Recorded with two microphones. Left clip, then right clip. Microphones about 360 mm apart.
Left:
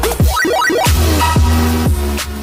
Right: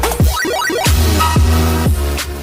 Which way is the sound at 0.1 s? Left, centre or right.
Centre.